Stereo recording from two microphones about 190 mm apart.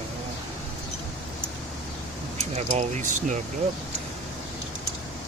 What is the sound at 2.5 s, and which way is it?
Speech, 40° right (ahead or behind).